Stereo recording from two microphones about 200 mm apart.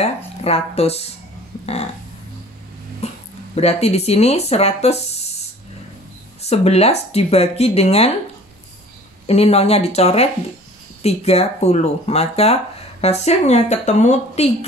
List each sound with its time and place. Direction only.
0.4 s speech: 30° left (ahead or behind)
3.0 s a sound: 30° left (ahead or behind)
3.5 s speech: 30° left (ahead or behind)
6.4 s speech: 30° left (ahead or behind)
9.2 s speech: 30° left (ahead or behind)